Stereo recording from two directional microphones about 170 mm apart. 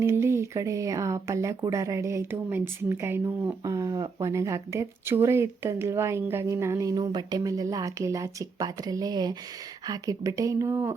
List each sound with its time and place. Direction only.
0.0 s speech: 15° right (ahead or behind)